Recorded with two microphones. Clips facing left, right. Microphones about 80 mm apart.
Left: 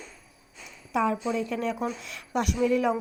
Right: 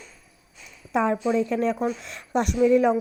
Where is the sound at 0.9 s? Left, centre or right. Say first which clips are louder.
Right 4 dB; right.